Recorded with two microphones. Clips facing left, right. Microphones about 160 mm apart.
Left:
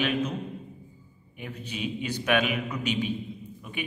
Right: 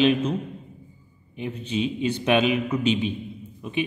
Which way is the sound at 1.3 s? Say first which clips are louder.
Right 9 dB; 25° right (ahead or behind).